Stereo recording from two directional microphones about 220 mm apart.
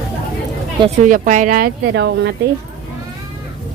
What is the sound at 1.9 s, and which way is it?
Speech, 55° right (ahead or behind).